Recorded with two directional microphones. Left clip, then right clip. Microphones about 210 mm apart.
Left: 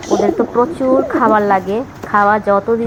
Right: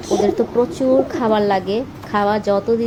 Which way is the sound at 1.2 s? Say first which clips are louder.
Left 5 dB; 10° right (ahead or behind).